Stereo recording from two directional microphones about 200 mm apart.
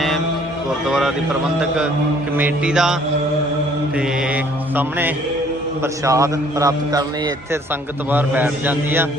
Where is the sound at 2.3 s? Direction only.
5° right (ahead or behind).